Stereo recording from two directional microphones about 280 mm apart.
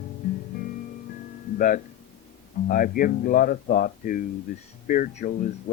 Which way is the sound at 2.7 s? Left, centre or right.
Left.